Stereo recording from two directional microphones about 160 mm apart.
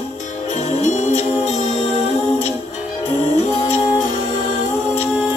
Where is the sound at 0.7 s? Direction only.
45° left (ahead or behind).